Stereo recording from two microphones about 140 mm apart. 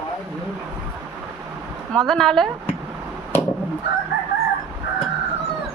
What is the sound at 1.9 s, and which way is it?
Speech, 5° left (ahead or behind).